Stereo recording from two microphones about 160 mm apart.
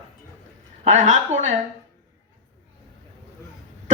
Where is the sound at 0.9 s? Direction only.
50° right (ahead or behind).